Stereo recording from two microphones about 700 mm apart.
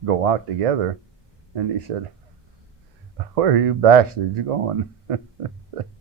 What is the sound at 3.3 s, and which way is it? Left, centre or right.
Speech, right.